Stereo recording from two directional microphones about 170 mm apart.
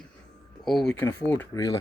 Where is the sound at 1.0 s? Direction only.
15° left (ahead or behind).